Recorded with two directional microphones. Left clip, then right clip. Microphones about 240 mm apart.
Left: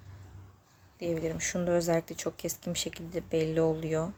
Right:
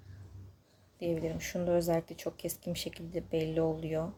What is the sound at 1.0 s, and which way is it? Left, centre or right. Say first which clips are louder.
Speech: left 3 dB; centre.